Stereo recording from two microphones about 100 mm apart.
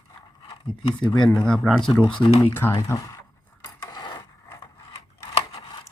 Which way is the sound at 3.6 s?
40° left (ahead or behind).